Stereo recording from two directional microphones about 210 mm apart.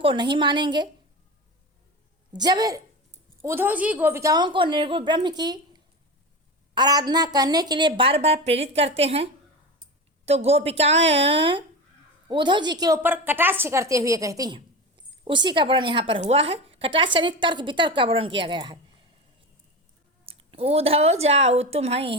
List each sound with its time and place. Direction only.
0.0 s a woman's voice: 20° right (ahead or behind)
2.3 s a woman's voice: 20° right (ahead or behind)
6.7 s a woman's voice: 20° right (ahead or behind)
20.2 s a woman's voice: 25° right (ahead or behind)